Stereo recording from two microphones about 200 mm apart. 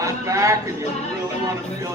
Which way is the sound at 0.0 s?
15° right (ahead or behind).